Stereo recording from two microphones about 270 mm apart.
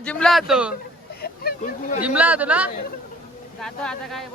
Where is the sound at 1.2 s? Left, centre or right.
Left.